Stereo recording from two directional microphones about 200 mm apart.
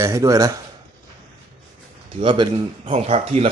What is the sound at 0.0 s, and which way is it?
Speech, 15° right (ahead or behind).